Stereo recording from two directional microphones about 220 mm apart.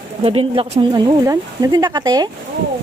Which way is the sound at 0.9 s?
15° right (ahead or behind).